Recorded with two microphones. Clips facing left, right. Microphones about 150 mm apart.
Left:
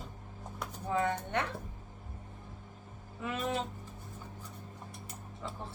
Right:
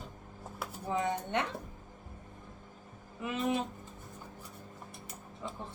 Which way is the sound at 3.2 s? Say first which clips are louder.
Right 2 dB; 15° right (ahead or behind).